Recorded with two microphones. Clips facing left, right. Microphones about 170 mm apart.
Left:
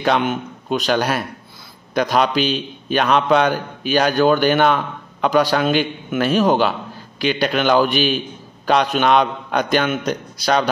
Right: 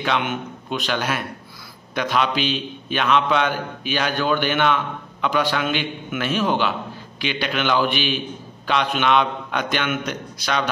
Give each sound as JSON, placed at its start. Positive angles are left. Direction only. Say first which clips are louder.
{"t": 0.0, "sound": "a man's voice", "louder": "left 5 dB", "side_deg": 40}